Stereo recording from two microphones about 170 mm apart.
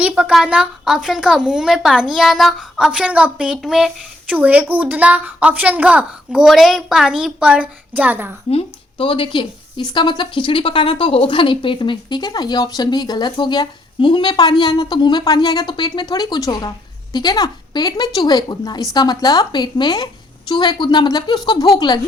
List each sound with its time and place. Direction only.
0.0 s a woman's voice: 5° right (ahead or behind)
8.4 s a woman's voice: 35° left (ahead or behind)